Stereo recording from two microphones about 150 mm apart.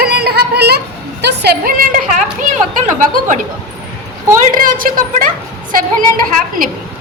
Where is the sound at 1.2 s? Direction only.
90° right.